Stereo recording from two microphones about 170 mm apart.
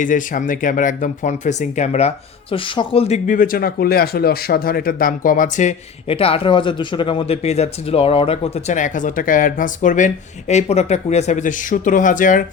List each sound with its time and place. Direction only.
0.0 s speech: 50° left (ahead or behind); by 3.2 s 35° left (ahead or behind)
3.2 s speech: 55° left (ahead or behind)